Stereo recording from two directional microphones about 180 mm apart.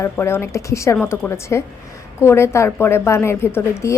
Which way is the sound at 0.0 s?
15° left (ahead or behind).